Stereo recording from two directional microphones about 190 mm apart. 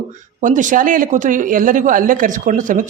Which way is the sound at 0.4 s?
40° right (ahead or behind).